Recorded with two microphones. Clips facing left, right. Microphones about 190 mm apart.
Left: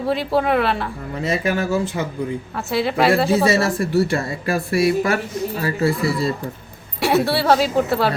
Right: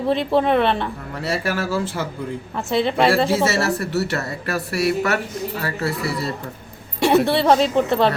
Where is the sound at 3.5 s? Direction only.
70° right (ahead or behind).